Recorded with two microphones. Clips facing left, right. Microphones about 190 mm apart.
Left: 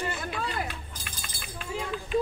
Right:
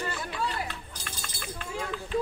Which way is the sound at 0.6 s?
10° left (ahead or behind).